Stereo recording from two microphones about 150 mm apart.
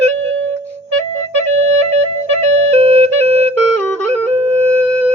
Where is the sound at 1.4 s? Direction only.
45° right (ahead or behind).